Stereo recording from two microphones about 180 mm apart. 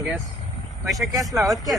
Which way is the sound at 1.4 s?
Centre (ahead or behind).